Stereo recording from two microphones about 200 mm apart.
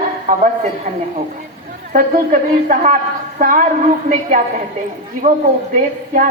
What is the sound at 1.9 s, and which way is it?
A woman's voice, 40° right (ahead or behind).